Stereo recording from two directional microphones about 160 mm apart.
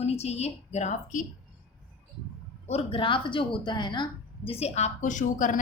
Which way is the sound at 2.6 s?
40° left (ahead or behind).